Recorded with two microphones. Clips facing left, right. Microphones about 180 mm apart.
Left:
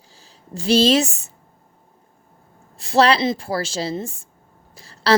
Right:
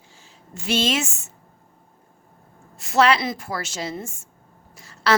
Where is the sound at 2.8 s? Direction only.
35° left (ahead or behind).